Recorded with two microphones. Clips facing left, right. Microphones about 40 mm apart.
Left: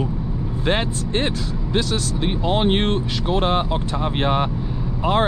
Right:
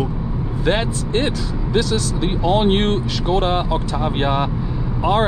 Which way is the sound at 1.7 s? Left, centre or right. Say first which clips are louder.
Right 3 dB; left.